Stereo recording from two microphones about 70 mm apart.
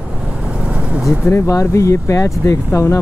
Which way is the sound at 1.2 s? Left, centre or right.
Left.